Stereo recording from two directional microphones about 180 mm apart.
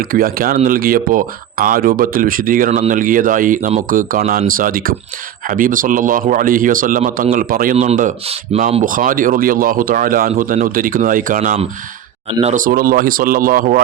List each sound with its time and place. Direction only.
0.0 s a man's voice: 55° right (ahead or behind)
12.4 s speech: 35° right (ahead or behind)
12.6 s a man's voice: 50° right (ahead or behind)